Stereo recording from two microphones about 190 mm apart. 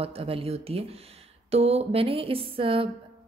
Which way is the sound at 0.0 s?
30° right (ahead or behind).